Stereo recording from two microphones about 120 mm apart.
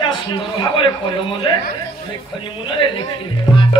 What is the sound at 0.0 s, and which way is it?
A man's voice, 40° left (ahead or behind).